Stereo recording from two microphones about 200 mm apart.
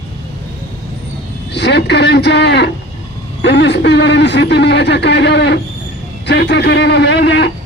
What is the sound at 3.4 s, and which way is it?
Speech, 60° left (ahead or behind).